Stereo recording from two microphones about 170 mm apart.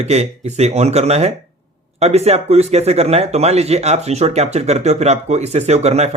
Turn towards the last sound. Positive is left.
turn(degrees=-40)  # may be behind; listen again after turning